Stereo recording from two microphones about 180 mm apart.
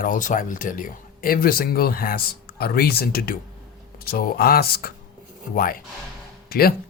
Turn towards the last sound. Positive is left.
turn(degrees=55)  # may be behind; listen again after turning